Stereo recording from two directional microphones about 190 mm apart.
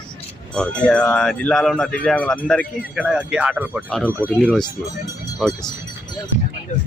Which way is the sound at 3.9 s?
5° left (ahead or behind).